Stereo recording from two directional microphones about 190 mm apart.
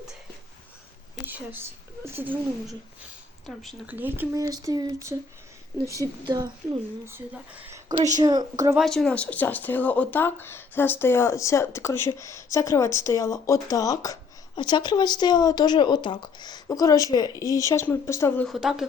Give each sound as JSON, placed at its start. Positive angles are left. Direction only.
{"t": 1.1, "sound": "a sound", "side_deg": -10}
{"t": 2.0, "sound": "speech", "side_deg": -10}
{"t": 3.4, "sound": "speech", "side_deg": 0}
{"t": 3.8, "sound": "speech", "side_deg": -10}
{"t": 7.6, "sound": "a sound", "side_deg": -15}
{"t": 8.2, "sound": "speech", "side_deg": -20}
{"t": 8.7, "sound": "speech", "side_deg": 0}
{"t": 18.4, "sound": "speech", "side_deg": 0}